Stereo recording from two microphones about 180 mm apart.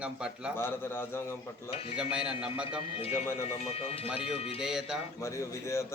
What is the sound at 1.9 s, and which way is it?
Speech, 5° right (ahead or behind).